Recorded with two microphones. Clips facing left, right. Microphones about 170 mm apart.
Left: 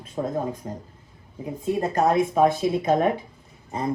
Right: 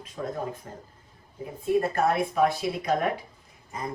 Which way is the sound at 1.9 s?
20° left (ahead or behind).